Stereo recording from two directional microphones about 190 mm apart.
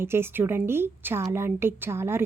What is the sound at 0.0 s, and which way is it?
A woman's voice, 10° right (ahead or behind).